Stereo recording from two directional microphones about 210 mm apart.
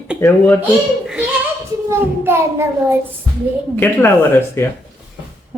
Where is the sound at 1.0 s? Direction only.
5° right (ahead or behind).